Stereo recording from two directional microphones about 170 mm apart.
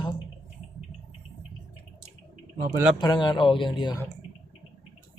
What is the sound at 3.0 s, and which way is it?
A man's voice, 25° left (ahead or behind).